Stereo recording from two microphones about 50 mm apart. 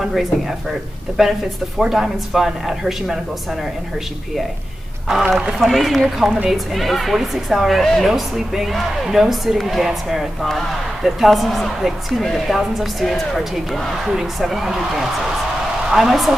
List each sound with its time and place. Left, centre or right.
0.0 s a woman's voice: centre
5.0 s a woman's voice: centre
5.6 s a woman's voice: centre
14.0 s a woman's voice: centre